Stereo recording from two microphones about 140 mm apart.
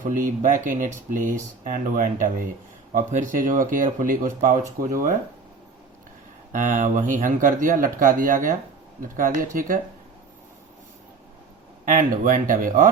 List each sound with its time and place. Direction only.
0.0 s speech: 70° right (ahead or behind)
6.5 s speech: 65° right (ahead or behind)
11.9 s speech: 70° right (ahead or behind)